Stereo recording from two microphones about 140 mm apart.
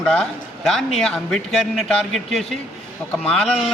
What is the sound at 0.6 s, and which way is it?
A man's voice, centre (ahead or behind).